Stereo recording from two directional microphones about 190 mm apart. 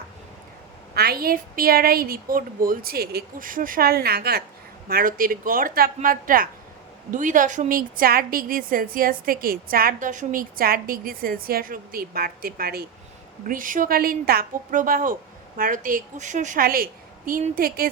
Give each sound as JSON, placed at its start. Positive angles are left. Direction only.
{"t": 0.9, "sound": "a woman's voice", "side_deg": -55}